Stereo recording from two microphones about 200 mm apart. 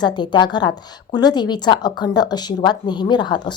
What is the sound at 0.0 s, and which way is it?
Speech, 20° left (ahead or behind).